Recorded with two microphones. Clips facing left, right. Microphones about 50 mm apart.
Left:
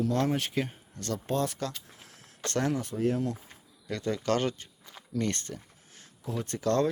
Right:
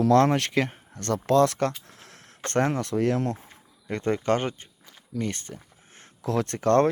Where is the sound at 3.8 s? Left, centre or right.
Right.